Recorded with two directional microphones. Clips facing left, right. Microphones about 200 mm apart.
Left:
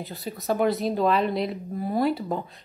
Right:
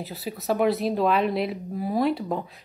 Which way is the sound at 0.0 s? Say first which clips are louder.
Right 1 dB; centre (ahead or behind).